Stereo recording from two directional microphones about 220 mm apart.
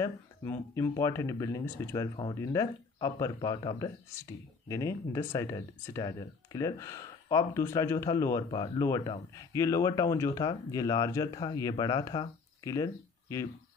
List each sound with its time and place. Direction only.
0.0 s speech: 15° left (ahead or behind)